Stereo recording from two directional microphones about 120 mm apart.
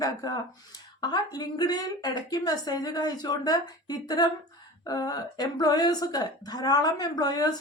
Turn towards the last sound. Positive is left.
turn(degrees=35)  # may be behind; listen again after turning